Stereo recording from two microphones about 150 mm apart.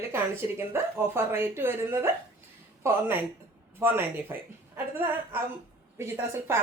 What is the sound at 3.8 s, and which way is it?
Speech, 15° right (ahead or behind).